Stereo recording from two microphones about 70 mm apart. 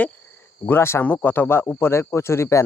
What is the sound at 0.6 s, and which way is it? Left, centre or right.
Speech, left.